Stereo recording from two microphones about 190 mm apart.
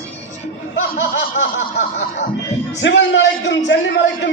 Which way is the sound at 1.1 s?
70° left (ahead or behind).